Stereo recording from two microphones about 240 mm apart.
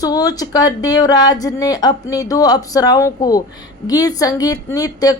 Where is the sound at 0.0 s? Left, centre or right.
Centre.